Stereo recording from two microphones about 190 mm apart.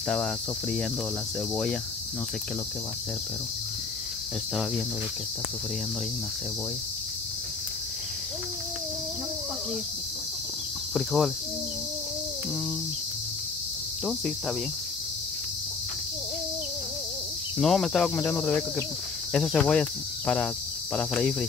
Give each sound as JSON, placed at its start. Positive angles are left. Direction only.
{"t": 0.1, "sound": "cricket", "side_deg": 5}
{"t": 10.9, "sound": "speech", "side_deg": 0}
{"t": 17.6, "sound": "cricket", "side_deg": 0}
{"t": 19.3, "sound": "speech", "side_deg": 0}
{"t": 20.9, "sound": "cricket", "side_deg": 5}